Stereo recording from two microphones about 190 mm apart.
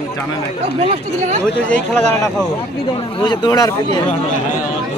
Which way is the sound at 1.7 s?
5° left (ahead or behind).